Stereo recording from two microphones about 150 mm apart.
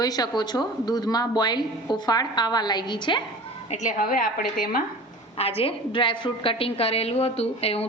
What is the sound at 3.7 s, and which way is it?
A woman's voice, 60° left (ahead or behind).